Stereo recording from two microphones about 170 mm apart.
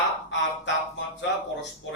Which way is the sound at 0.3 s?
90° left.